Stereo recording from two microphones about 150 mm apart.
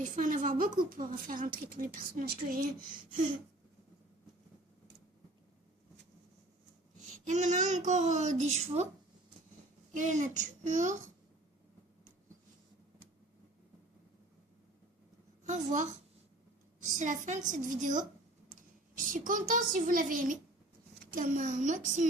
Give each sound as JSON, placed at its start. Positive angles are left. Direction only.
{"t": 0.0, "sound": "a woman's voice", "side_deg": -60}
{"t": 7.3, "sound": "a child's voice", "side_deg": -55}
{"t": 9.9, "sound": "a woman's voice", "side_deg": -55}
{"t": 15.4, "sound": "a woman's voice", "side_deg": -55}